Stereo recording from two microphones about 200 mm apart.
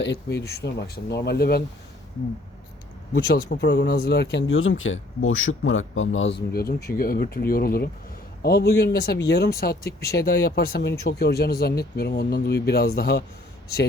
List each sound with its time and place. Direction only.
0.0 s speech: 60° left (ahead or behind)
3.6 s speech: 55° left (ahead or behind)